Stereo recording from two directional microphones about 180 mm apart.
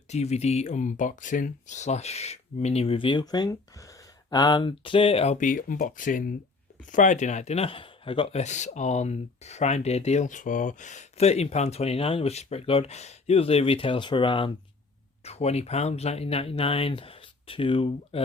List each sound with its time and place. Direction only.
0.1 s a man's voice: 40° left (ahead or behind)